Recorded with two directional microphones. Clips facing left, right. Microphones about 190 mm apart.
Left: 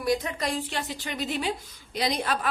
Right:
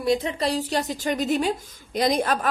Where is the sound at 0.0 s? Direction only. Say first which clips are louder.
Right 4 dB; 25° right (ahead or behind).